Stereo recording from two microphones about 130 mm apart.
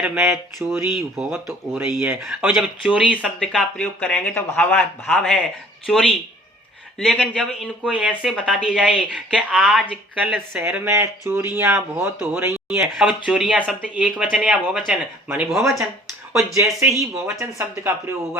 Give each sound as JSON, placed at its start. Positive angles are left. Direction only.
{"t": 0.0, "sound": "speech", "side_deg": -5}
{"t": 0.6, "sound": "speech", "side_deg": -20}
{"t": 2.3, "sound": "speech", "side_deg": -5}
{"t": 3.4, "sound": "speech", "side_deg": 5}
{"t": 12.8, "sound": "speech", "side_deg": -5}
{"t": 16.6, "sound": "speech", "side_deg": -20}